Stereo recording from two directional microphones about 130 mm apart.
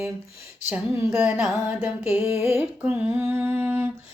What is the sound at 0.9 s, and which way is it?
Music, 20° right (ahead or behind).